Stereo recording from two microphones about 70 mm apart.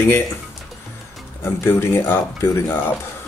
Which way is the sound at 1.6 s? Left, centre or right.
Left.